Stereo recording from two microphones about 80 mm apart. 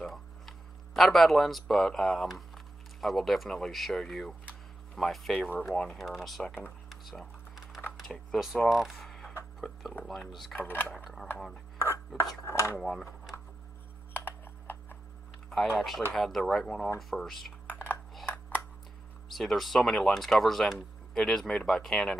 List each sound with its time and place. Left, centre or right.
0.0 s speech: centre
6.9 s typing: centre
8.0 s speech: centre
10.5 s speech: left
12.4 s speech: left
12.7 s speech: centre
14.1 s computer keyboard: left
15.5 s speech: centre
19.2 s speech: centre